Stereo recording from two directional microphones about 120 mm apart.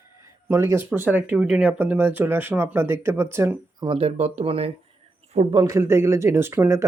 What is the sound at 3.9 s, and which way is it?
Speech, 60° right (ahead or behind).